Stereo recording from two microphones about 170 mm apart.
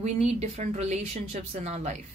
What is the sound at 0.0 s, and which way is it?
A woman's voice, 40° right (ahead or behind).